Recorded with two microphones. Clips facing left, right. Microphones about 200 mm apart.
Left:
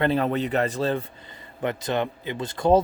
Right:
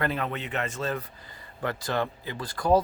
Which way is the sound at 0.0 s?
35° left (ahead or behind).